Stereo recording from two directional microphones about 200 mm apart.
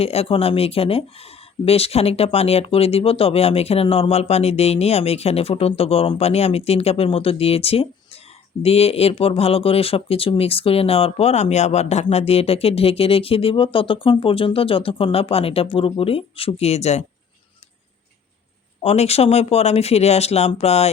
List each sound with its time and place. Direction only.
0.0 s speech: 30° left (ahead or behind)
18.8 s speech: 30° left (ahead or behind)